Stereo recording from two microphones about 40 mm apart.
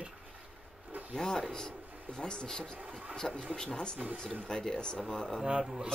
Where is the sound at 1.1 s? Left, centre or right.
Centre.